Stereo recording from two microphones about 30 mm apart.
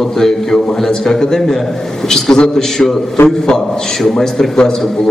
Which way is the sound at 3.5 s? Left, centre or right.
Centre.